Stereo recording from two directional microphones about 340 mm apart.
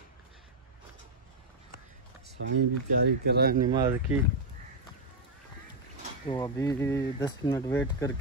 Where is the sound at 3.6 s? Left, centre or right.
Centre.